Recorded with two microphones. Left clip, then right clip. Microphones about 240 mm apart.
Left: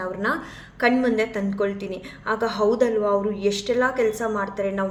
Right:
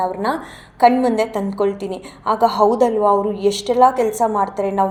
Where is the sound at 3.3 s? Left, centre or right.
Centre.